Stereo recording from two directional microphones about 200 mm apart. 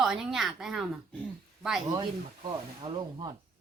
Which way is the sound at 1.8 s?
20° right (ahead or behind).